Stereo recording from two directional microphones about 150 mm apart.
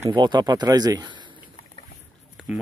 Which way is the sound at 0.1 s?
30° right (ahead or behind).